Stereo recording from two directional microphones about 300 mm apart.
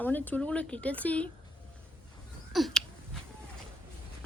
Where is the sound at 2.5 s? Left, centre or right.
Centre.